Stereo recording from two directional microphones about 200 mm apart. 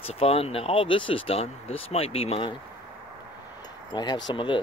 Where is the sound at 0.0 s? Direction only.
30° left (ahead or behind).